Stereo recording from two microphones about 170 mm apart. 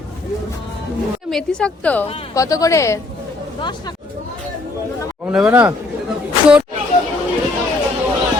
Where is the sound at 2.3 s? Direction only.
20° left (ahead or behind).